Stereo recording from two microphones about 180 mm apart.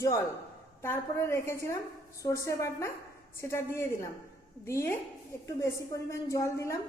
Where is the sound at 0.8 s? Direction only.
15° left (ahead or behind).